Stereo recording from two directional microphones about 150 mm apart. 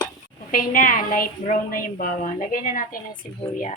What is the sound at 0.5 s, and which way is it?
A woman's voice, 70° left (ahead or behind).